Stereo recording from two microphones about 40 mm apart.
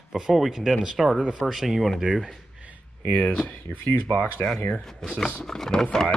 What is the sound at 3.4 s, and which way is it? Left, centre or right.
Speech, left.